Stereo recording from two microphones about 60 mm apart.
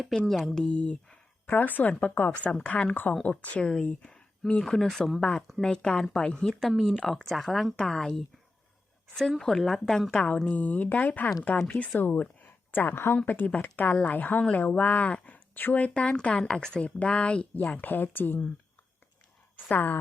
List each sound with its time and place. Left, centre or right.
0.3 s speech: centre
0.6 s speech: centre
1.5 s a woman's voice: left; by 8.2 s centre
9.4 s a woman's voice: centre; by 18.5 s left
19.5 s a woman's voice: left